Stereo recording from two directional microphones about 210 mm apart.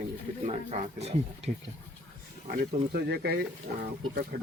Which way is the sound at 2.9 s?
50° right (ahead or behind).